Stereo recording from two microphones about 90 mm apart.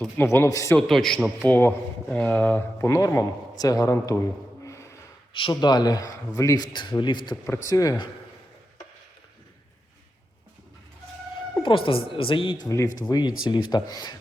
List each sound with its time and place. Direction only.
0.2 s speech: 25° left (ahead or behind)
0.4 s a man's voice: 35° left (ahead or behind)
0.8 s a man's voice: 5° left (ahead or behind)
1.4 s speech: 20° left (ahead or behind)
2.8 s a man's voice: 35° left (ahead or behind)
4.6 s gasp: 30° left (ahead or behind)
5.3 s speech: 75° left (ahead or behind)
5.6 s speech: 50° left (ahead or behind)
6.7 s speech: 60° left (ahead or behind)
7.5 s a man's voice: 35° left (ahead or behind)
11.6 s a woman's voice: 80° left
12.6 s a man's voice: 35° left (ahead or behind)
13.1 s speech: 50° left (ahead or behind)